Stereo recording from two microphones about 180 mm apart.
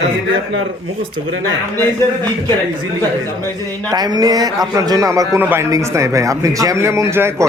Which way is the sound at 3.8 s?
20° right (ahead or behind).